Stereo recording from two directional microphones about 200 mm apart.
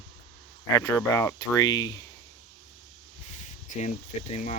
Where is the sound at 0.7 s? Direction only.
15° left (ahead or behind).